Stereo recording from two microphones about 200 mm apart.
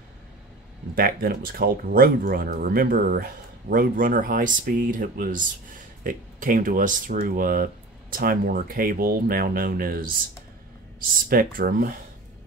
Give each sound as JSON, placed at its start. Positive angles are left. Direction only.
{"t": 0.9, "sound": "speech", "side_deg": -50}